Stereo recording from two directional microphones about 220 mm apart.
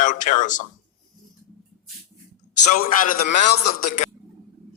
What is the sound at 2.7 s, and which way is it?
A man's voice, 40° left (ahead or behind).